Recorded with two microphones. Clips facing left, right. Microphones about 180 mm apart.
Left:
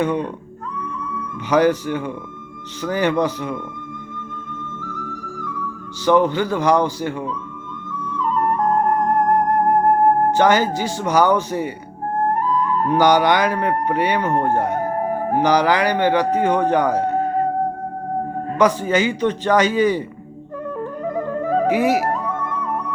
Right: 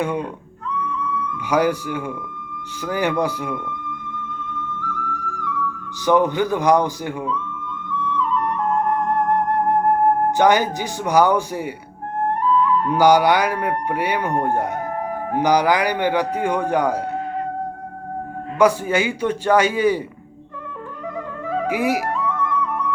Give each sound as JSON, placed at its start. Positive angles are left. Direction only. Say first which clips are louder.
{"t": 0.0, "sound": "speech", "louder": "left 3 dB", "side_deg": -10}
{"t": 0.8, "sound": "music", "louder": "right 4 dB", "side_deg": 45}
{"t": 1.5, "sound": "speech", "louder": "left 3 dB", "side_deg": -10}
{"t": 6.1, "sound": "speech", "louder": "left 1 dB", "side_deg": -15}
{"t": 7.9, "sound": "flute", "louder": "right 1 dB", "side_deg": 45}
{"t": 10.3, "sound": "speech", "louder": "left 1 dB", "side_deg": -15}
{"t": 12.5, "sound": "music", "louder": "right 2 dB", "side_deg": 45}
{"t": 13.0, "sound": "speech", "louder": "right 1 dB", "side_deg": -10}
{"t": 17.0, "sound": "music", "louder": "left 6 dB", "side_deg": 40}
{"t": 18.6, "sound": "speech", "louder": "even", "side_deg": -10}
{"t": 21.2, "sound": "music", "louder": "left 6 dB", "side_deg": 45}